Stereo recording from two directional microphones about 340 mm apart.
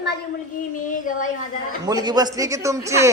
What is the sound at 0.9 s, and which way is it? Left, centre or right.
Speech, left.